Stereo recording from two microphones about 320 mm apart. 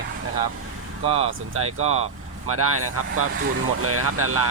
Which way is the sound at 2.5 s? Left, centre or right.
Right.